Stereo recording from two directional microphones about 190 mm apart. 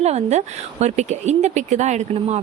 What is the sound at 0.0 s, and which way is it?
Speech, 35° right (ahead or behind).